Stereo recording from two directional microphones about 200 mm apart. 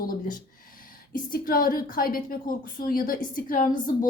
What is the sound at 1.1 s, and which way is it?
A woman's voice, 45° left (ahead or behind).